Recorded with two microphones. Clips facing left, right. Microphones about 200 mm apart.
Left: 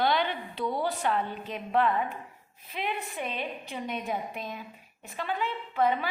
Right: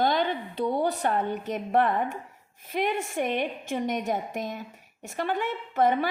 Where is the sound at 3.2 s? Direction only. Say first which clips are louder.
Right 10 dB; 60° right (ahead or behind).